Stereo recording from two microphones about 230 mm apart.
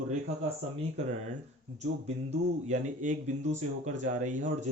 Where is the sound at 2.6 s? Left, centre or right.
Right.